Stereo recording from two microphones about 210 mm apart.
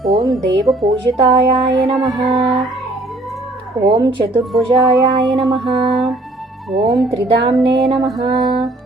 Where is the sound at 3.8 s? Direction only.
15° right (ahead or behind).